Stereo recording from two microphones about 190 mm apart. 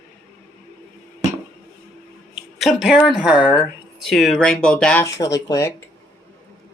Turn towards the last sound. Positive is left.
turn(degrees=15)  # may be behind; listen again after turning